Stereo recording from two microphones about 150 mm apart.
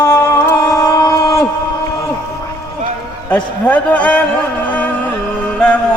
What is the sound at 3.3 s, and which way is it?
Speech, 10° left (ahead or behind).